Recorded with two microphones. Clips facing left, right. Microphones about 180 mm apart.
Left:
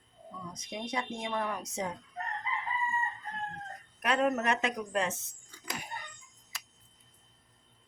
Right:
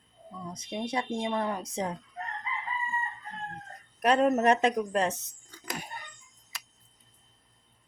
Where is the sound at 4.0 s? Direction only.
35° right (ahead or behind).